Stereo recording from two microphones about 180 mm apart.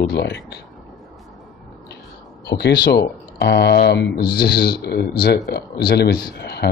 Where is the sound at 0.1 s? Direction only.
70° left (ahead or behind).